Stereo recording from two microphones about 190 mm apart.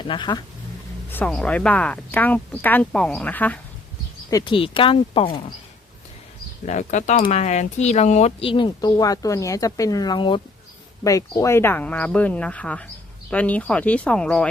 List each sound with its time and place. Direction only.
0.0 s speech: 25° left (ahead or behind)
1.1 s speech: 5° left (ahead or behind)
4.3 s speech: 20° left (ahead or behind)
6.7 s speech: 40° left (ahead or behind); by 14.4 s 5° left (ahead or behind)